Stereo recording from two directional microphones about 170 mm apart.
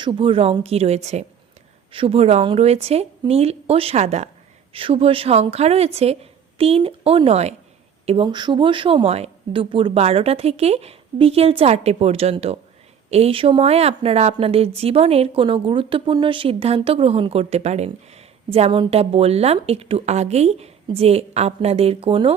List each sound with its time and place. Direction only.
0.0 s speech: 30° right (ahead or behind)
4.7 s speech: 30° right (ahead or behind)